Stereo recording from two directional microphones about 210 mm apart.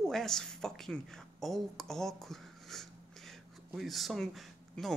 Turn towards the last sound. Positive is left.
turn(degrees=0)  # may be behind; listen again after turning